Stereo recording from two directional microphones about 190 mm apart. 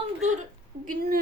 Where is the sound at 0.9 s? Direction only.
50° right (ahead or behind).